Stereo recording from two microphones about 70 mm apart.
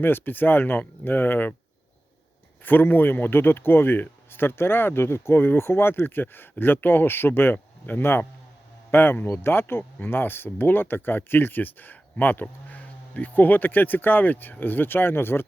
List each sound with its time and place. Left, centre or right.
0.0 s speech: left
2.6 s speech: left